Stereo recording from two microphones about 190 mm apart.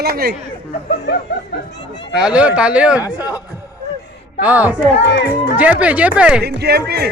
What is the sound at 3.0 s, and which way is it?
Speech, 20° left (ahead or behind).